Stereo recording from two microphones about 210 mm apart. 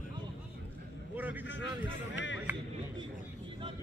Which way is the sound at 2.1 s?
60° left (ahead or behind).